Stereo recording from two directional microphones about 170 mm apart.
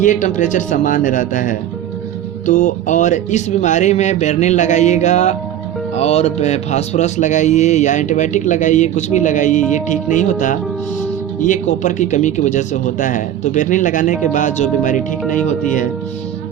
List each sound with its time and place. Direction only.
0.0 s a man's voice: 45° left (ahead or behind)